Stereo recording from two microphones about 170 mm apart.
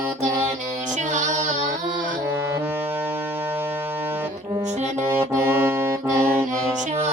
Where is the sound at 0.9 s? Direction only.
45° right (ahead or behind).